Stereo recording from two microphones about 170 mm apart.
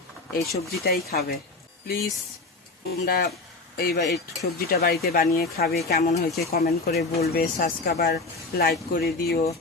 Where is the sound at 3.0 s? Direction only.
65° left (ahead or behind).